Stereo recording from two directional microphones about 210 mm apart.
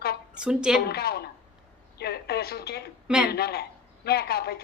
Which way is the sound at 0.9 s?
50° left (ahead or behind).